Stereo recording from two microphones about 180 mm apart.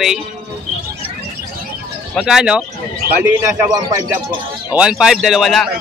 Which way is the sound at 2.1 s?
Centre (ahead or behind).